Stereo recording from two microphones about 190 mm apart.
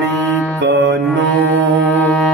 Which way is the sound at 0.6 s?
65° right (ahead or behind).